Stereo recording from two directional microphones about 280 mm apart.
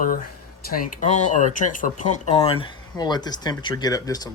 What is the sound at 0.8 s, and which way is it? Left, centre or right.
Speech, left.